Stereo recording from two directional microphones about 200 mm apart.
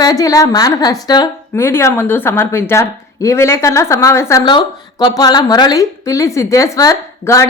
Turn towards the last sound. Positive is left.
turn(degrees=15)  # may be behind; listen again after turning